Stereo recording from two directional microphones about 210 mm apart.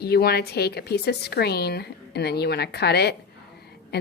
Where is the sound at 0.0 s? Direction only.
50° left (ahead or behind).